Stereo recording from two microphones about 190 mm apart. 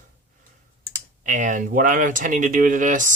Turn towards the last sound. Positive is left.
turn(degrees=-45)  # may be behind; listen again after turning